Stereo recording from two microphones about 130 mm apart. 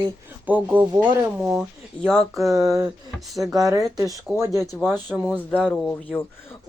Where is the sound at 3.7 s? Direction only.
25° right (ahead or behind).